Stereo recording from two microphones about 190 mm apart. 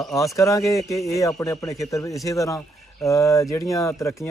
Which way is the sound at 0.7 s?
Centre (ahead or behind).